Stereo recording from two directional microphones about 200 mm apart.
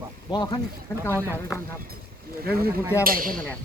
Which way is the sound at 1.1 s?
10° right (ahead or behind).